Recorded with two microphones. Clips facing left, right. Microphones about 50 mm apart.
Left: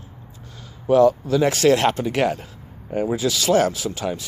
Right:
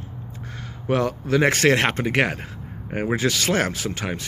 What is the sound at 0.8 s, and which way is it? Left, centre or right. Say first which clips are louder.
Speech: left 8 dB; right.